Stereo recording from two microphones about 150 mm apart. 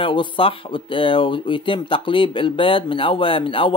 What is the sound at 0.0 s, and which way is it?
Speech, 35° left (ahead or behind).